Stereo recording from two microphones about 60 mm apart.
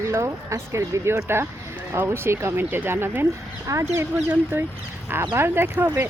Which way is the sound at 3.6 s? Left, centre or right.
Right.